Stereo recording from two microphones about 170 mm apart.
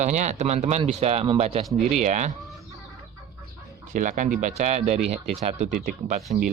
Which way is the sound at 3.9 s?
50° right (ahead or behind).